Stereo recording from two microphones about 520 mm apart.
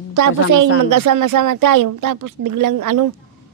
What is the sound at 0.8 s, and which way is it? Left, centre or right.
A woman's voice, right.